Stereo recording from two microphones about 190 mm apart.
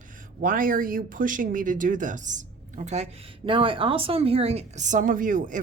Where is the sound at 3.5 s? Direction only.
30° right (ahead or behind); by 5.6 s 45° right (ahead or behind).